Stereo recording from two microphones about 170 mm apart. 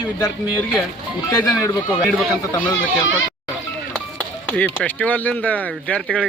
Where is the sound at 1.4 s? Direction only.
20° left (ahead or behind).